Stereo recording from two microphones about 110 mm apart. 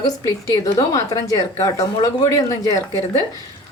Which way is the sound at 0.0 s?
30° left (ahead or behind).